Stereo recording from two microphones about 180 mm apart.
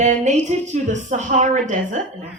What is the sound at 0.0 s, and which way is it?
A woman's voice, 40° right (ahead or behind).